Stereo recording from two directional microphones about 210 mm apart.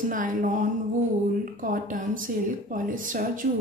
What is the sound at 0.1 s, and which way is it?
Speech, 40° right (ahead or behind).